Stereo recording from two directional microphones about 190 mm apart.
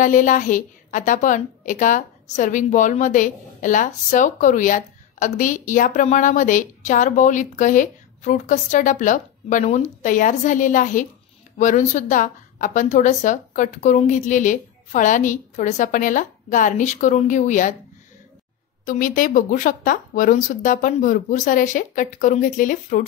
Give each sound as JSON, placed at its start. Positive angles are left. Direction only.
{"t": 0.0, "sound": "a woman's voice", "side_deg": 45}
{"t": 18.9, "sound": "speech", "side_deg": 45}